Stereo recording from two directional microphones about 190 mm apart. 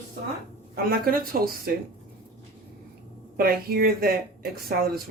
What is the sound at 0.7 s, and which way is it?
Speech, 50° right (ahead or behind).